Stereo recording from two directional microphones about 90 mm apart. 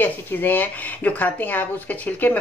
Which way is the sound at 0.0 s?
20° left (ahead or behind).